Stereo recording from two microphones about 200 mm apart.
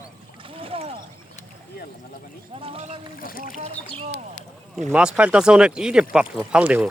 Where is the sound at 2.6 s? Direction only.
30° right (ahead or behind).